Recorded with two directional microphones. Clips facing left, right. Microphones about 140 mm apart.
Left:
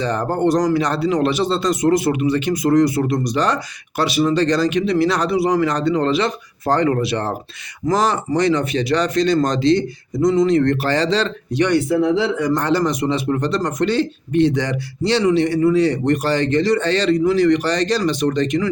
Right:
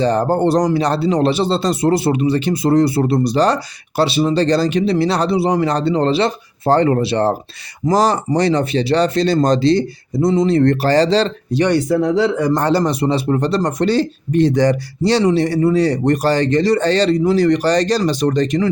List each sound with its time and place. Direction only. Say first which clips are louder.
0.0 s speech: right 4 dB; 35° right (ahead or behind)